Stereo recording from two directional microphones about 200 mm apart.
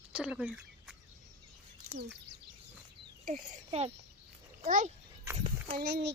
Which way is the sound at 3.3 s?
30° right (ahead or behind).